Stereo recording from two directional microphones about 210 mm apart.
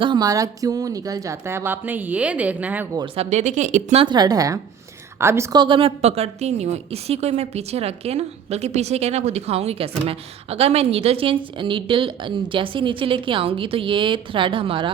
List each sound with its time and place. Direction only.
0.0 s speech: 20° right (ahead or behind)
3.0 s speech: 30° right (ahead or behind)
4.0 s a woman's voice: 20° right (ahead or behind)